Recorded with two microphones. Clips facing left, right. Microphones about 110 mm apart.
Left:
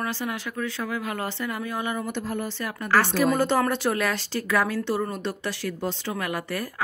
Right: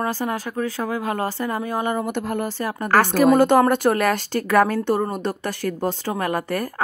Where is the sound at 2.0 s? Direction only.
55° right (ahead or behind).